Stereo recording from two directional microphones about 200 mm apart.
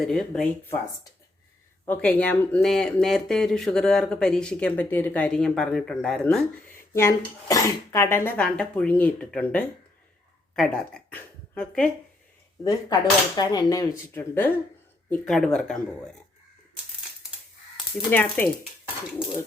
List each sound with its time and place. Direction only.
0.0 s speech: centre (ahead or behind)
1.8 s speech: 10° left (ahead or behind)
6.9 s a woman's voice: 15° left (ahead or behind)
12.6 s speech: 20° left (ahead or behind); by 15.8 s 5° left (ahead or behind)
18.1 s speech: 10° left (ahead or behind)